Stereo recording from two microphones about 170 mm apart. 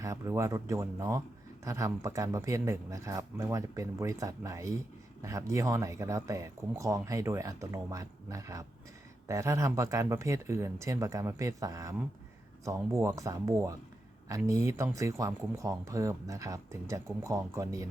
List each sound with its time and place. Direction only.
0.0 s speech: 15° right (ahead or behind)